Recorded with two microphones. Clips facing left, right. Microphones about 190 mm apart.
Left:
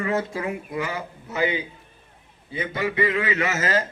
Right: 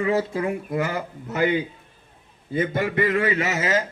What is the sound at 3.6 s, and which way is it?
Speech, 10° right (ahead or behind).